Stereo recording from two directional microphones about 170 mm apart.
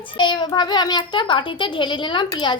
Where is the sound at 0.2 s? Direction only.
25° left (ahead or behind).